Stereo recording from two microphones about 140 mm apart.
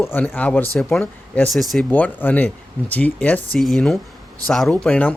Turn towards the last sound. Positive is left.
turn(degrees=5)  # may be behind; listen again after turning